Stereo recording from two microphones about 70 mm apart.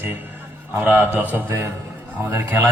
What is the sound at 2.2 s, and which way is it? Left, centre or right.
Speech, right.